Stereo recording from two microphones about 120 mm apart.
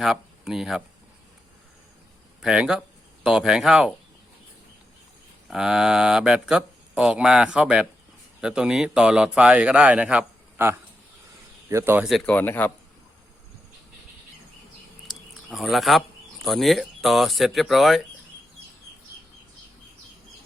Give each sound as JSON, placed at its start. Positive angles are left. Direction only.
{"t": 0.0, "sound": "speech", "side_deg": -5}
{"t": 2.4, "sound": "speech", "side_deg": -5}
{"t": 5.5, "sound": "speech", "side_deg": -5}
{"t": 12.2, "sound": "speech", "side_deg": 15}
{"t": 15.0, "sound": "speech", "side_deg": 0}